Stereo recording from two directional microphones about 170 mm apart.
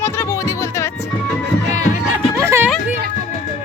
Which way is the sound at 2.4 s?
15° right (ahead or behind).